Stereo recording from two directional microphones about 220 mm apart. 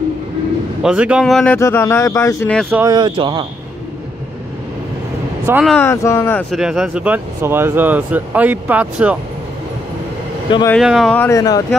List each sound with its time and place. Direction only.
0.8 s speech: 5° right (ahead or behind); by 2.5 s 15° left (ahead or behind)
2.7 s speech: 15° right (ahead or behind)
5.5 s speech: 5° right (ahead or behind)
5.8 s speech: 10° left (ahead or behind)
6.5 s speech: centre (ahead or behind)
10.7 s speech: centre (ahead or behind); by 11.6 s 15° left (ahead or behind)